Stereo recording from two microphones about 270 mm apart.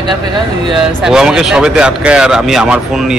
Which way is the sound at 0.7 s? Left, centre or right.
Centre.